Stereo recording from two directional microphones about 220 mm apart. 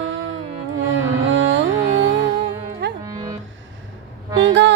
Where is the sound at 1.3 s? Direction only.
55° right (ahead or behind).